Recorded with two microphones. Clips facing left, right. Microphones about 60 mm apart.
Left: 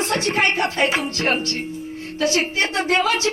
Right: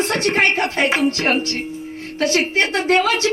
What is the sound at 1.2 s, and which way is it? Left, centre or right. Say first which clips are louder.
Tuning fork: right 2 dB; right.